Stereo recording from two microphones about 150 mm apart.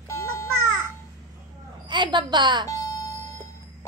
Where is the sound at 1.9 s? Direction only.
30° right (ahead or behind).